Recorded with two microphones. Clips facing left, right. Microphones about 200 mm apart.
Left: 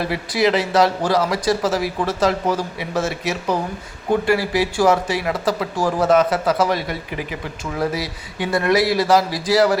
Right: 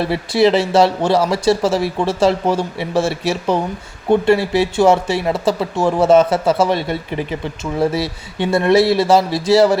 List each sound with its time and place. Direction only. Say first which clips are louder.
0.0 s speech: right 5 dB; 30° right (ahead or behind)